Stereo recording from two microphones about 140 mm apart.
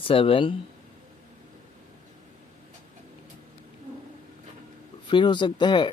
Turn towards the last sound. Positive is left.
turn(degrees=35)  # may be behind; listen again after turning